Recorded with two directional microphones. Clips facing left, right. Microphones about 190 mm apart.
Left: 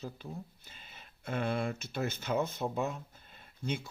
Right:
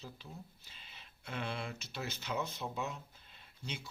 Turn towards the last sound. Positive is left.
turn(degrees=55)  # may be behind; listen again after turning